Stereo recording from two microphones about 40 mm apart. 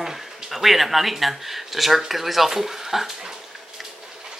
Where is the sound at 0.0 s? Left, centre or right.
Centre.